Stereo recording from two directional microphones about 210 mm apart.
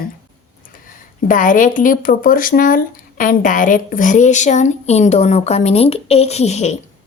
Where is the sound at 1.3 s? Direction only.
40° left (ahead or behind).